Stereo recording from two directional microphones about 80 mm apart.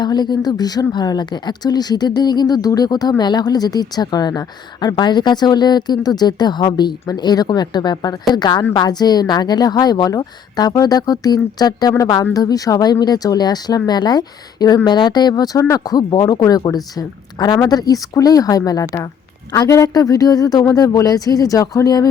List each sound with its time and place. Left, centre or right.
0.0 s speech: left
14.8 s speech: left